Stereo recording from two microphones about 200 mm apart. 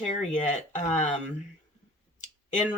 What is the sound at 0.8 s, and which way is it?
Speech, 35° left (ahead or behind).